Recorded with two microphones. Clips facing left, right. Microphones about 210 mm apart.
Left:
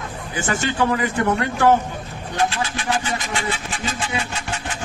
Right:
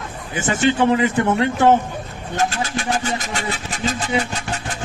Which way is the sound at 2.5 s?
45° right (ahead or behind).